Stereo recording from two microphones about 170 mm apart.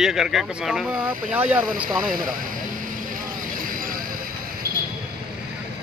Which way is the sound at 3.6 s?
55° right (ahead or behind).